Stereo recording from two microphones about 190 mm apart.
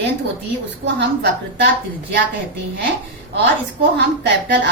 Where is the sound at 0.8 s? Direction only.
70° right (ahead or behind).